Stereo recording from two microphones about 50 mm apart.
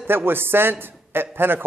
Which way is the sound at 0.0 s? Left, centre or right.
Right.